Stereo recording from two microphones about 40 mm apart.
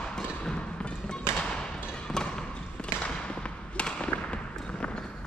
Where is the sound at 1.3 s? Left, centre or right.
Centre.